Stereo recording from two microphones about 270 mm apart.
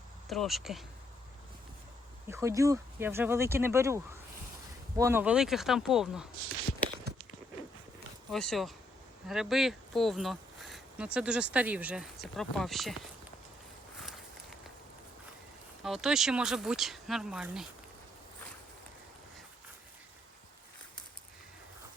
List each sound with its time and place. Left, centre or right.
0.3 s speech: centre
2.2 s speech: centre
8.3 s speech: centre
15.8 s speech: centre